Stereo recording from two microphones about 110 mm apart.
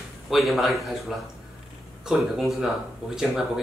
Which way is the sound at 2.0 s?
Centre (ahead or behind).